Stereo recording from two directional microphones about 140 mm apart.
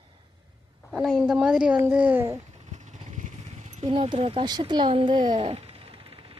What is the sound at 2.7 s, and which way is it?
Vehicle, 60° right (ahead or behind).